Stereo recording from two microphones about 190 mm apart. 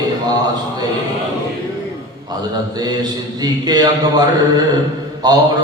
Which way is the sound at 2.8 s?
20° right (ahead or behind).